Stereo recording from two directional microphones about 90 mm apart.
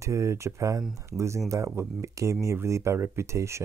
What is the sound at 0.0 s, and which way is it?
Speech, 35° right (ahead or behind).